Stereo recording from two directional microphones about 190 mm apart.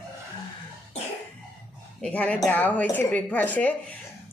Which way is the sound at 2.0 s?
5° left (ahead or behind).